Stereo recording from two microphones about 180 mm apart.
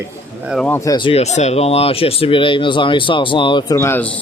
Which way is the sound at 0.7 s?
20° left (ahead or behind).